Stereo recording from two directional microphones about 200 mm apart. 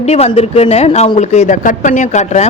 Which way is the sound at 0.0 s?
30° left (ahead or behind).